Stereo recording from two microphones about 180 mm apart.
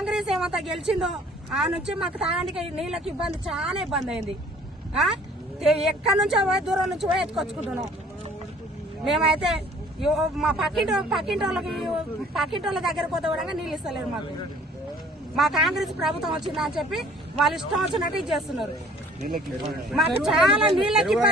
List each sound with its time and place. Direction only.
0.0 s a woman's voice: 5° right (ahead or behind)
5.5 s speech: centre (ahead or behind)
9.0 s speech: centre (ahead or behind)
15.4 s speech: centre (ahead or behind)
19.2 s speech: 40° right (ahead or behind)
19.9 s speech: centre (ahead or behind)